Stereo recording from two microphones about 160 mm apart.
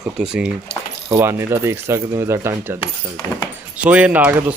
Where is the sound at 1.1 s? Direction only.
15° right (ahead or behind).